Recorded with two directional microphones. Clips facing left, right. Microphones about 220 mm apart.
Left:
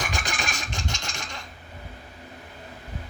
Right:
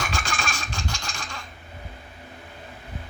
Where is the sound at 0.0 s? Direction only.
20° left (ahead or behind).